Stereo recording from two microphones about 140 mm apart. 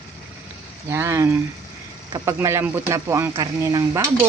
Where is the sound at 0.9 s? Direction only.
20° right (ahead or behind).